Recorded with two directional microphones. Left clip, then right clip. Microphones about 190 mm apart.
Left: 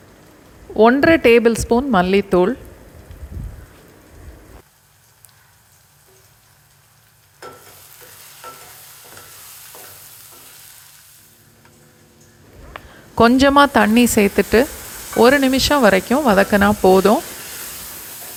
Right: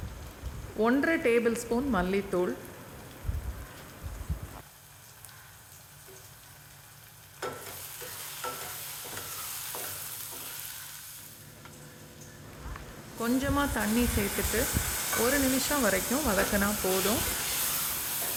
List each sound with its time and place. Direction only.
0.8 s speech: 35° left (ahead or behind)
13.1 s speech: 50° left (ahead or behind)